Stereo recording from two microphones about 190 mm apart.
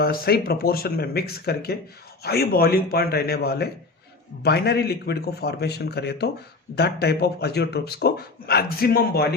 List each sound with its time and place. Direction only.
0.0 s speech: 55° left (ahead or behind)